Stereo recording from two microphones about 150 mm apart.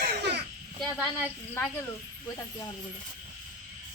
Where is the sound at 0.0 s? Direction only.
90° right.